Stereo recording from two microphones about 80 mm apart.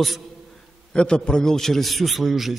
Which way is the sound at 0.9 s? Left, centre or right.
Centre.